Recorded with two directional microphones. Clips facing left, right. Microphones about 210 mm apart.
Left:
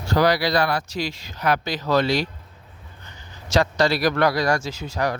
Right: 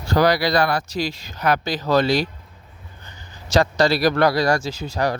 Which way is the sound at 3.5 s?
35° right (ahead or behind).